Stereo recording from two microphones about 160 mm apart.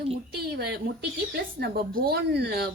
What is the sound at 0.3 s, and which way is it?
Speech, 85° right.